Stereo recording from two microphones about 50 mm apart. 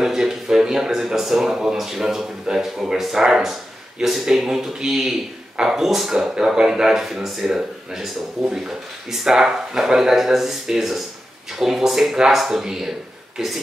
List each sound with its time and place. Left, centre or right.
0.0 s speech: centre